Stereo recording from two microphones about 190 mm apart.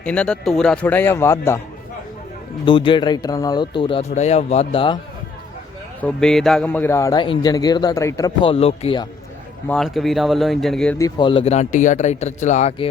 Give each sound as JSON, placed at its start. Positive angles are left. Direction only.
{"t": 0.0, "sound": "a man's voice", "side_deg": 5}
{"t": 2.6, "sound": "a man's voice", "side_deg": 25}
{"t": 6.0, "sound": "a man's voice", "side_deg": 5}
{"t": 9.6, "sound": "speech", "side_deg": 0}
{"t": 10.9, "sound": "speech", "side_deg": 20}